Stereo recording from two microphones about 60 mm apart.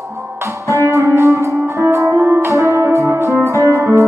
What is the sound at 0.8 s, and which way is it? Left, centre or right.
Music, right.